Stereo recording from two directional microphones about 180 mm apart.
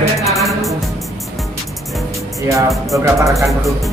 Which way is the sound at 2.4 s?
15° right (ahead or behind).